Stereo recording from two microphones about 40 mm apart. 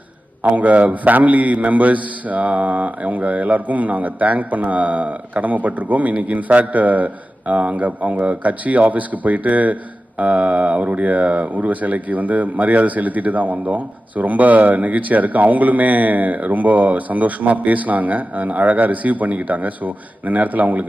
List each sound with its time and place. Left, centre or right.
0.4 s a man's voice: right